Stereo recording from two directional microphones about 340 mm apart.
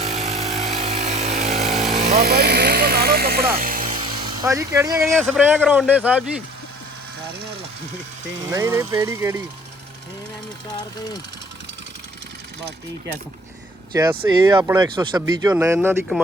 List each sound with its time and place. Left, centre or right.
0.2 s power tool: centre
0.5 s a sound: centre
0.8 s a sound: centre
1.5 s vehicle: centre
2.0 s helicopter: right; by 5.1 s centre
5.1 s a man's voice: centre
8.4 s speech: centre
13.9 s speech: centre